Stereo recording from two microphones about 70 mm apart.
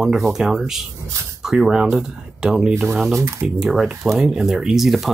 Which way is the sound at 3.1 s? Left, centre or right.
Right.